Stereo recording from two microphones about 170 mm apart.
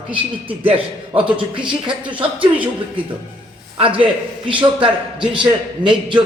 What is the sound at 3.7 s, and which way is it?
A man's voice, 30° right (ahead or behind).